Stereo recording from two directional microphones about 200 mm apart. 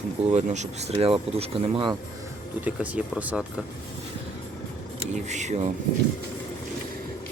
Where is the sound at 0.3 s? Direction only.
35° right (ahead or behind).